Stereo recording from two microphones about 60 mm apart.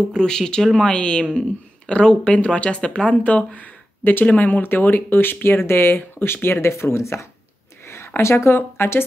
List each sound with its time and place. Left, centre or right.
0.1 s speech: centre; by 9.0 s left